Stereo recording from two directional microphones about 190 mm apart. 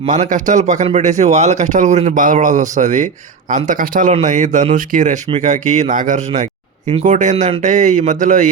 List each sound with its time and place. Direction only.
0.0 s speech: 35° right (ahead or behind)